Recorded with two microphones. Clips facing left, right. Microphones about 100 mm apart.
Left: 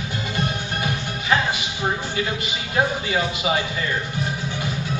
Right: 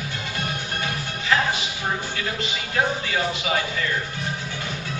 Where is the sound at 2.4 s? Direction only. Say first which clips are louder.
Right 1 dB; 15° left (ahead or behind).